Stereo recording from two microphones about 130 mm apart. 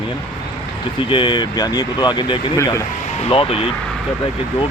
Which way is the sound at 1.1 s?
40° left (ahead or behind).